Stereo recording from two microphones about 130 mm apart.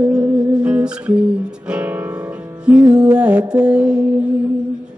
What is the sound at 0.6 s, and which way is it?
Guitar, 10° right (ahead or behind).